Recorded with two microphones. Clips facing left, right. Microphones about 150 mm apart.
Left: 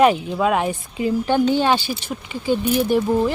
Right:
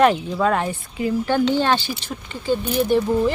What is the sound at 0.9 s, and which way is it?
Speech, 20° left (ahead or behind).